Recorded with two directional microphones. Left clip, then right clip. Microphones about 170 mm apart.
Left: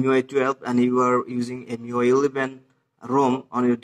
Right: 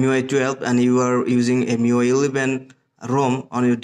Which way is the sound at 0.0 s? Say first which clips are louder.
Right 1 dB; 30° right (ahead or behind).